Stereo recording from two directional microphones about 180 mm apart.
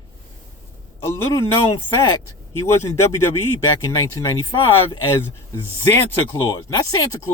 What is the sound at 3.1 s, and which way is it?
Speech, 15° left (ahead or behind).